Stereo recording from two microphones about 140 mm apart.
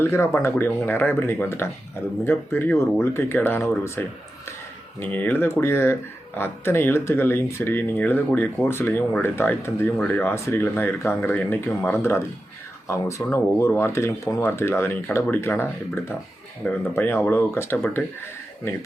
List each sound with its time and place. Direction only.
0.0 s speech: 20° left (ahead or behind)